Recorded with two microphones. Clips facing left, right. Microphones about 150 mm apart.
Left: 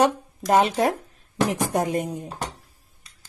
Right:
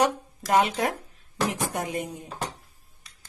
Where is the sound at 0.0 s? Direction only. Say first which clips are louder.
Left 4 dB; 35° left (ahead or behind).